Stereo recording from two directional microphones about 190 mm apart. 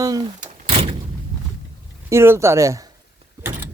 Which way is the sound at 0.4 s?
30° right (ahead or behind).